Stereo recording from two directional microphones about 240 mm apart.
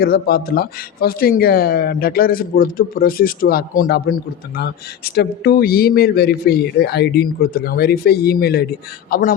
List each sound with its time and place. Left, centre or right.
0.0 s speech: left